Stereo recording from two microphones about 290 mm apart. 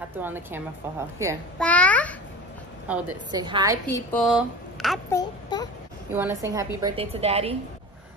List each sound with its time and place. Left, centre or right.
0.2 s a woman's voice: centre
1.6 s babbling: centre
2.9 s a woman's voice: centre
3.8 s a woman's voice: centre
5.1 s child singing: centre
6.1 s a woman's voice: centre